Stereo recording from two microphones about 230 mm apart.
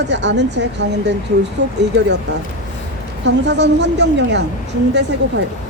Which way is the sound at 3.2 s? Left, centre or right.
Right.